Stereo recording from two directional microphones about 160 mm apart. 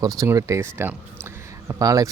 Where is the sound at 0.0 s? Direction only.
20° right (ahead or behind).